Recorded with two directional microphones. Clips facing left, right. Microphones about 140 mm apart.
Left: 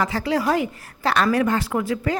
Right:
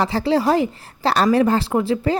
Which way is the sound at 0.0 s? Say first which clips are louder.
Right 4 dB; 30° right (ahead or behind).